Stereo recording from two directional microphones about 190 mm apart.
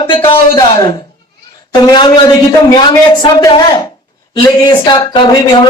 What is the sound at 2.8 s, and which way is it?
A man's voice, 25° left (ahead or behind).